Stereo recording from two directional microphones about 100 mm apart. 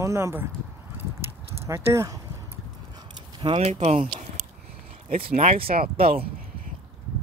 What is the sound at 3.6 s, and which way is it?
Speech, 90° right.